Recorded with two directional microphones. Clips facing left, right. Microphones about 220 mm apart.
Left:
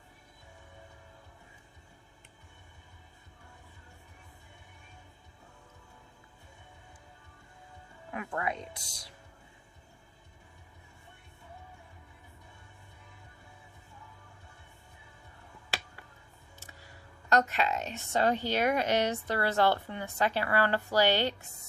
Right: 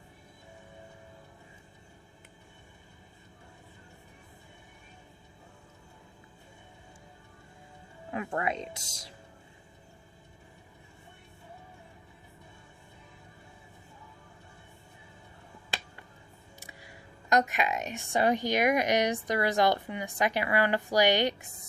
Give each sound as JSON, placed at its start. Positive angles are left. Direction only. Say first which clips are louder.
{"t": 8.1, "sound": "speech", "louder": "right 3 dB", "side_deg": -25}
{"t": 16.6, "sound": "speech", "louder": "right 2 dB", "side_deg": -15}